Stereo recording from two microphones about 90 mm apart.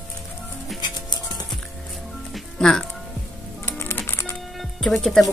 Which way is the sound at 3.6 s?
25° left (ahead or behind).